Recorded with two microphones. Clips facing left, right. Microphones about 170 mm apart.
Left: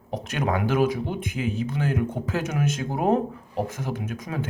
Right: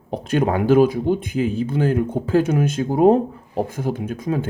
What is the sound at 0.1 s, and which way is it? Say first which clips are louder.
Speech: right 6 dB; 30° right (ahead or behind).